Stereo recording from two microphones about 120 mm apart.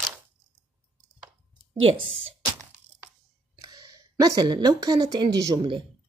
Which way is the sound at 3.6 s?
30° right (ahead or behind).